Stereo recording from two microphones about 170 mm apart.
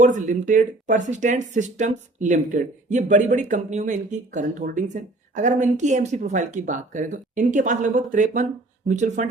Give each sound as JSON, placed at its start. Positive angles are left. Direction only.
{"t": 0.0, "sound": "speech", "side_deg": -45}